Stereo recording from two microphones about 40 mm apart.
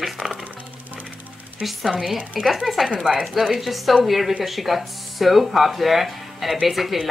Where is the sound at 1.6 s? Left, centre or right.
Centre.